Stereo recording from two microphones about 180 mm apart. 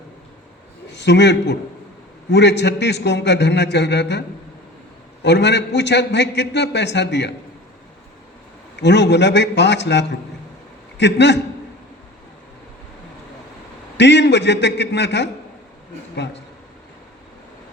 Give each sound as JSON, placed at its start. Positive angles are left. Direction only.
{"t": 0.9, "sound": "a man's voice", "side_deg": 75}
{"t": 5.2, "sound": "a man's voice", "side_deg": 70}
{"t": 8.7, "sound": "a man's voice", "side_deg": 70}
{"t": 13.9, "sound": "a man's voice", "side_deg": 70}